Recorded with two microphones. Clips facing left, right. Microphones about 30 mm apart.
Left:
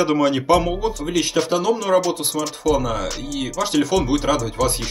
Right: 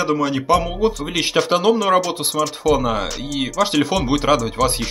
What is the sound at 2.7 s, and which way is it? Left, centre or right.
Speech, right.